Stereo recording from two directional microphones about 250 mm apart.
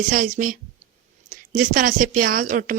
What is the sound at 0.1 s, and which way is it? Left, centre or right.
Speech, right.